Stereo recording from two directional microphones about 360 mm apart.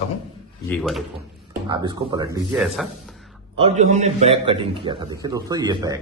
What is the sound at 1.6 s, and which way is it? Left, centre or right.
A man's voice, centre.